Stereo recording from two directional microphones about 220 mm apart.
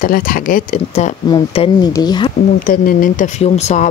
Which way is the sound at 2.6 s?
40° left (ahead or behind).